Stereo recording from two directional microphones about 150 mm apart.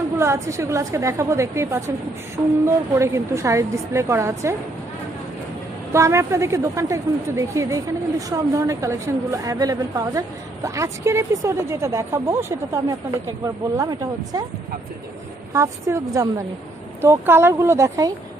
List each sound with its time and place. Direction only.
0.2 s a woman's voice: 20° right (ahead or behind)
5.9 s a woman's voice: 20° right (ahead or behind)
15.5 s a woman's voice: 20° right (ahead or behind)